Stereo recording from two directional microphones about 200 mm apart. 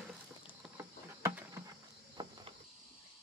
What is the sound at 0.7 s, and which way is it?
Patter, 10° right (ahead or behind).